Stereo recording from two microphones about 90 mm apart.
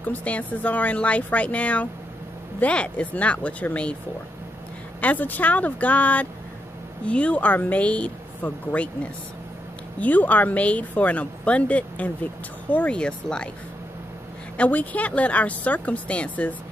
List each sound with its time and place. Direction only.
0.0 s speech: 15° left (ahead or behind)
5.0 s speech: 20° left (ahead or behind)
14.6 s speech: 15° left (ahead or behind)